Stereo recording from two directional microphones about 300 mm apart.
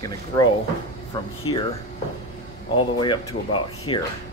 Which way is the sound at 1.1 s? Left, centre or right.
Centre.